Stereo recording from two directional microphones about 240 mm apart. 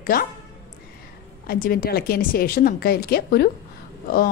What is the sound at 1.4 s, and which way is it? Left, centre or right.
Speech, left.